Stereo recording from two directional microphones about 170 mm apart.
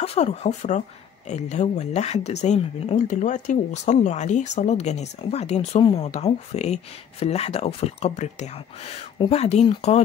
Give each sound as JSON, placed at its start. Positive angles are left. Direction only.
{"t": 0.0, "sound": "speech", "side_deg": 40}